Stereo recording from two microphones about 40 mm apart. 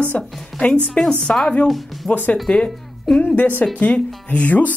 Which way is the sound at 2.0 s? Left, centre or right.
Centre.